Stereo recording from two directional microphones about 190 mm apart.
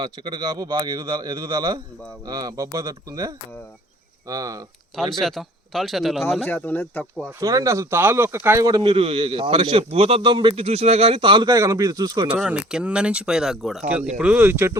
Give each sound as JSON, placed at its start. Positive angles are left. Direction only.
{"t": 0.0, "sound": "a man's voice", "side_deg": -25}
{"t": 4.9, "sound": "speech", "side_deg": 0}
{"t": 6.5, "sound": "speech", "side_deg": 10}
{"t": 7.3, "sound": "a man's voice", "side_deg": -15}
{"t": 12.3, "sound": "speech", "side_deg": -5}